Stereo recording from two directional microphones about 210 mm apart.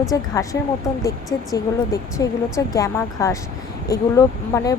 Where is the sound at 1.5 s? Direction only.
15° left (ahead or behind).